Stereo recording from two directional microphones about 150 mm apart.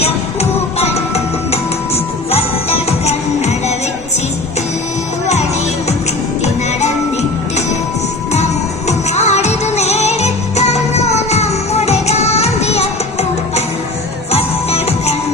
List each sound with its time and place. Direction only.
0.8 s music: 45° left (ahead or behind)
5.2 s music: 50° left (ahead or behind)
8.9 s music: 50° left (ahead or behind)
14.3 s music: 45° left (ahead or behind)